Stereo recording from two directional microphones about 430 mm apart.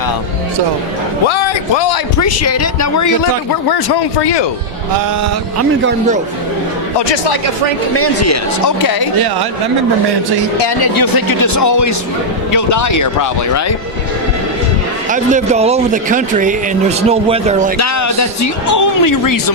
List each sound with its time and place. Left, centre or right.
1.3 s speech: left
2.1 s speech: left
3.7 s speech: left
7.9 s speech: left
9.1 s speech: right
10.6 s speech: left
15.1 s speech: centre
17.7 s speech: left